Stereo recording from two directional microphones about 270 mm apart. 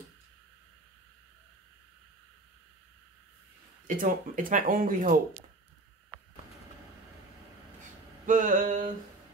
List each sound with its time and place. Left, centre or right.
3.8 s speech: right
8.3 s mantra: right